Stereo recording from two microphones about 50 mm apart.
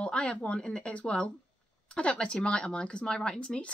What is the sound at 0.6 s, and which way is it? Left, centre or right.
Speech, centre.